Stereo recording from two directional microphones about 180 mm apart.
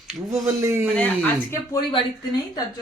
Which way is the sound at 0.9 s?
5° left (ahead or behind).